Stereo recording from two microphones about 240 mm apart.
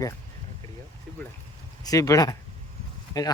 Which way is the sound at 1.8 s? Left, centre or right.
Centre.